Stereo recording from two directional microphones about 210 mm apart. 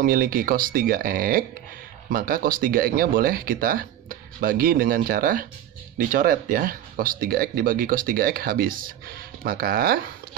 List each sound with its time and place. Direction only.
0.0 s speech: 45° right (ahead or behind)